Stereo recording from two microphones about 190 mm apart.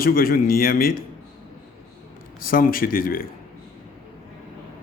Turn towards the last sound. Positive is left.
turn(degrees=50)  # may be behind; listen again after turning